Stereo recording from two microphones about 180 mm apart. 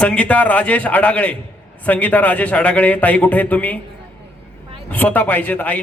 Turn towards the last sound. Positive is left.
turn(degrees=10)  # may be behind; listen again after turning